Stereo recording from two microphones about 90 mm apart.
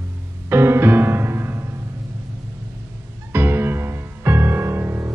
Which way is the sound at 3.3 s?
25° right (ahead or behind).